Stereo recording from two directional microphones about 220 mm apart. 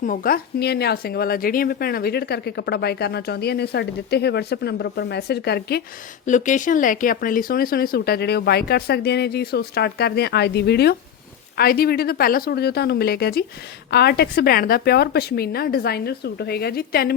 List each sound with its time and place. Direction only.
0.0 s speech: 40° left (ahead or behind)
6.2 s speech: 35° left (ahead or behind)